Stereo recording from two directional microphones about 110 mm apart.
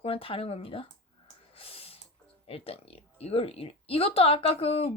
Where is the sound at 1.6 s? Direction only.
60° left (ahead or behind).